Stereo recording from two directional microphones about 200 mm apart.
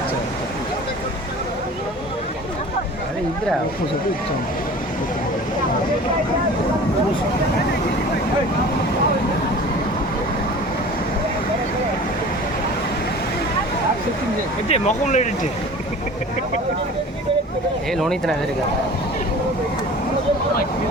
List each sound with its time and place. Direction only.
14.7 s speech: 35° left (ahead or behind)
17.9 s speech: centre (ahead or behind)